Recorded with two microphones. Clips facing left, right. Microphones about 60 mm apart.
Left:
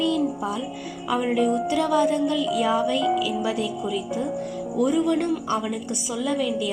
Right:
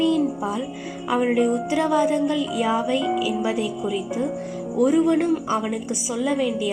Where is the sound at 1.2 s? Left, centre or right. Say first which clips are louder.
Right 3 dB; right.